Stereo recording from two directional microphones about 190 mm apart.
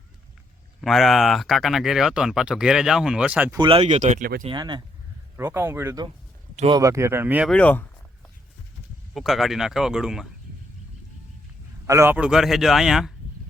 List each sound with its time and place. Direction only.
0.8 s speech: centre (ahead or behind)
3.6 s speech: 30° right (ahead or behind)
4.4 s speech: 25° right (ahead or behind)
7.5 s speech: 5° left (ahead or behind)
9.1 s speech: centre (ahead or behind)
11.9 s speech: 15° right (ahead or behind)